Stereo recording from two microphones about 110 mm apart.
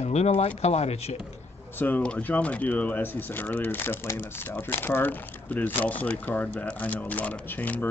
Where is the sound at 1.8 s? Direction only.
15° left (ahead or behind).